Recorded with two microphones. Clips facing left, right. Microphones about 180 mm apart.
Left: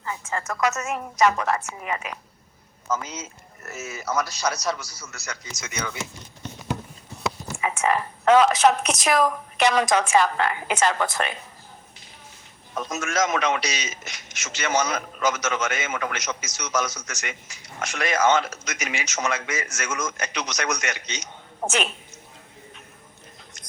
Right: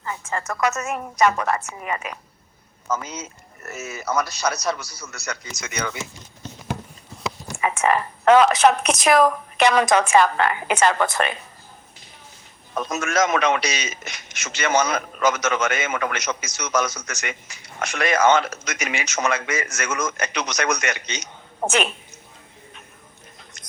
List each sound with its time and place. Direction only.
0.3 s a woman's voice: 55° right (ahead or behind)
7.6 s a man's voice: 60° right (ahead or behind)
12.7 s a man's voice: 60° right (ahead or behind)